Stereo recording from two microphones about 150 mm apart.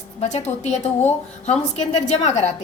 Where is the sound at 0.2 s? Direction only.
50° left (ahead or behind).